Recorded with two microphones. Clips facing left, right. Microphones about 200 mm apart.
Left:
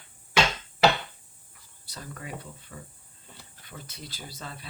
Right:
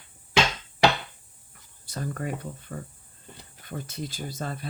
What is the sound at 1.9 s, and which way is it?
Speech, 50° right (ahead or behind).